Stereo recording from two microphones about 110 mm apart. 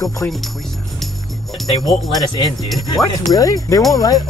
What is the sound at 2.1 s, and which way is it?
Music, 35° left (ahead or behind).